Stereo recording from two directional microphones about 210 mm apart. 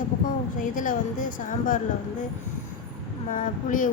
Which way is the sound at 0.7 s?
40° left (ahead or behind).